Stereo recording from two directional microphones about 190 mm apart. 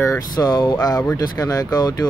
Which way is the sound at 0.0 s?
15° left (ahead or behind).